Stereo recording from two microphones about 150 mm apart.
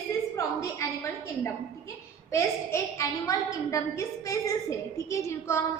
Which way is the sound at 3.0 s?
20° left (ahead or behind).